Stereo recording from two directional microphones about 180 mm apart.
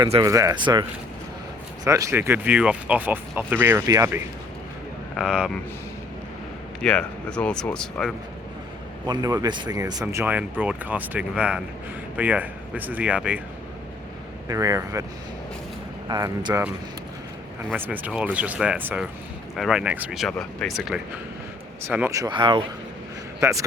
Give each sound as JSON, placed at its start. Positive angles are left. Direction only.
{"t": 0.2, "sound": "speech", "side_deg": -15}
{"t": 5.1, "sound": "speech", "side_deg": -5}
{"t": 6.8, "sound": "speech", "side_deg": 5}
{"t": 9.0, "sound": "speech", "side_deg": -20}
{"t": 14.4, "sound": "speech", "side_deg": -20}
{"t": 16.0, "sound": "speech", "side_deg": -20}
{"t": 17.7, "sound": "speech", "side_deg": -10}
{"t": 21.8, "sound": "speech", "side_deg": -15}
{"t": 23.4, "sound": "a man's voice", "side_deg": -15}